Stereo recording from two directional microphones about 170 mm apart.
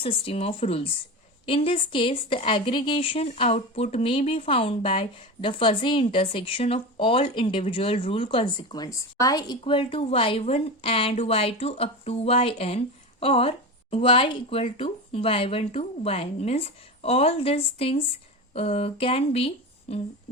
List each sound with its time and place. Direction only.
0.0 s a woman's voice: 35° left (ahead or behind)